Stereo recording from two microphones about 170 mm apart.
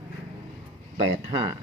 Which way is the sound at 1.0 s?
35° right (ahead or behind).